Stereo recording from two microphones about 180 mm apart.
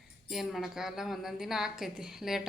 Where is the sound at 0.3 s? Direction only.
Centre (ahead or behind).